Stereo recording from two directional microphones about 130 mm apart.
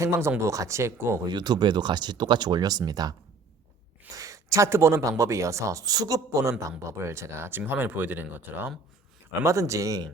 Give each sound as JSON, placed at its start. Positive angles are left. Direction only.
{"t": 0.0, "sound": "speech", "side_deg": -20}
{"t": 1.2, "sound": "speech", "side_deg": -35}